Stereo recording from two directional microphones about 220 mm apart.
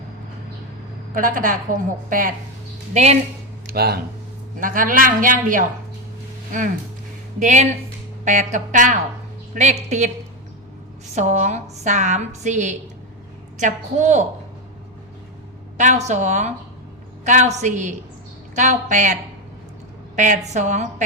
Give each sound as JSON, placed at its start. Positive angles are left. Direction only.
{"t": 1.1, "sound": "a woman's voice", "side_deg": -40}
{"t": 3.7, "sound": "a woman's voice", "side_deg": -45}
{"t": 7.3, "sound": "a woman's voice", "side_deg": -35}
{"t": 11.1, "sound": "a woman's voice", "side_deg": -30}
{"t": 15.8, "sound": "a woman's voice", "side_deg": -35}
{"t": 20.1, "sound": "a woman's voice", "side_deg": -35}